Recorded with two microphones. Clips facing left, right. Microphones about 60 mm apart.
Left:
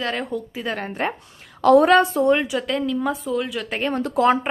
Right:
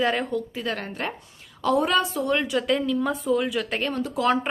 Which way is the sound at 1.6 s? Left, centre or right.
Left.